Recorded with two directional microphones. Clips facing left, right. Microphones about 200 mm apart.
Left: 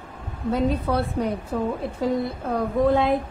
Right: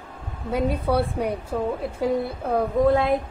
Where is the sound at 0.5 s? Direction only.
10° right (ahead or behind).